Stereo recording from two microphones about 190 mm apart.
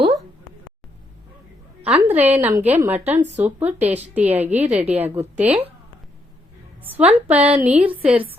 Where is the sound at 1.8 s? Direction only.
10° right (ahead or behind).